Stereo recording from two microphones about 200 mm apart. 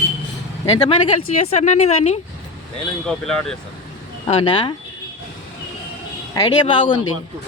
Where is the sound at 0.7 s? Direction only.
25° left (ahead or behind).